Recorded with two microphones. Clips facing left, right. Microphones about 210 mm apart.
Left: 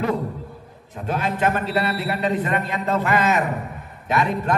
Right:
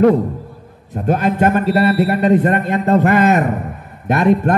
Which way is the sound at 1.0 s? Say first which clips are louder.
Right 7 dB; 45° right (ahead or behind).